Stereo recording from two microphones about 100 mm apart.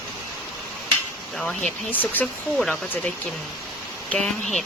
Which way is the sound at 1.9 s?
15° left (ahead or behind).